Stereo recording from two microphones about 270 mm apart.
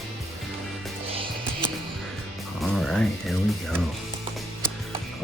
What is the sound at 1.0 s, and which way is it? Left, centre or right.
Music, right.